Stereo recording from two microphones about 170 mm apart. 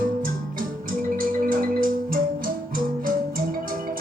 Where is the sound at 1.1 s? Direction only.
55° right (ahead or behind).